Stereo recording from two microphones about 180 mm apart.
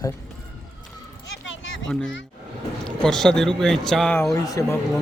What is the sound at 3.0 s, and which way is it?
Speech, 5° left (ahead or behind).